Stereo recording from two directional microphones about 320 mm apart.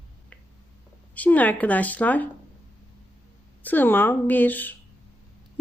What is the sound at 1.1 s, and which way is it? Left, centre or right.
Speech, centre.